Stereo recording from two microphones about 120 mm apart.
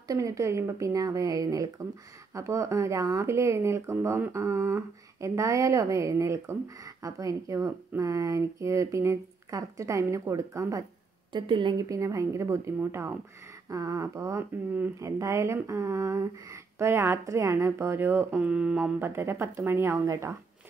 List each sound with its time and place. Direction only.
0.1 s speech: 30° right (ahead or behind)
11.3 s speech: 40° right (ahead or behind); by 14.4 s 25° right (ahead or behind)
14.7 s speech: 15° right (ahead or behind)
15.0 s speech: 25° right (ahead or behind)